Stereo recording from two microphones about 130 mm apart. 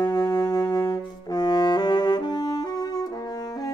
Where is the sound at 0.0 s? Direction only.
30° left (ahead or behind).